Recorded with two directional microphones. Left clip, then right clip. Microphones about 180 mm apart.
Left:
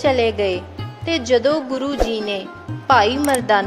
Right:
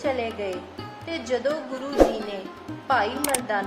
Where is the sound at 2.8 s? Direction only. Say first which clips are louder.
Left 9 dB; 55° left (ahead or behind).